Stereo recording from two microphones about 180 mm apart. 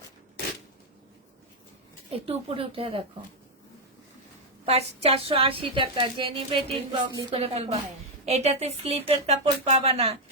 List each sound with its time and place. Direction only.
2.1 s a woman's voice: 35° right (ahead or behind)
4.6 s a woman's voice: 35° right (ahead or behind)